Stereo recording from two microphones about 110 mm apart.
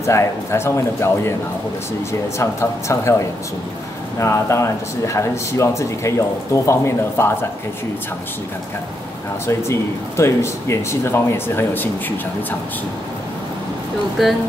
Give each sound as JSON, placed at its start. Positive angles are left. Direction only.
{"t": 0.0, "sound": "speech", "side_deg": 25}
{"t": 2.3, "sound": "speech", "side_deg": 25}
{"t": 9.5, "sound": "speech", "side_deg": 25}